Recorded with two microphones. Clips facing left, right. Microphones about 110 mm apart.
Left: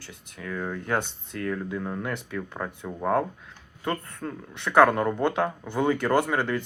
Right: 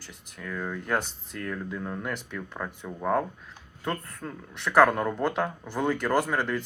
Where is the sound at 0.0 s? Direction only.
Centre (ahead or behind).